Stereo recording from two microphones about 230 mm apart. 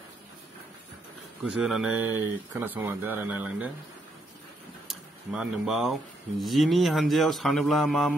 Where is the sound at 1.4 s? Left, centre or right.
Centre.